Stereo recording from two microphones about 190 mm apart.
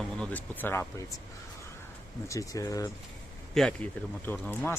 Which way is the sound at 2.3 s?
15° left (ahead or behind).